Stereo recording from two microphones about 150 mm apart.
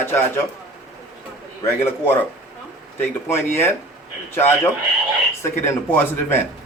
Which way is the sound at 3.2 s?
15° left (ahead or behind).